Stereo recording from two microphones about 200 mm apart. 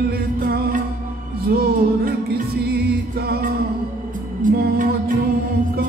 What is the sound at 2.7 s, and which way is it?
Music, 50° right (ahead or behind).